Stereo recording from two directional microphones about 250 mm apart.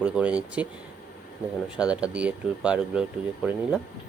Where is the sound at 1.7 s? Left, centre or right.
Centre.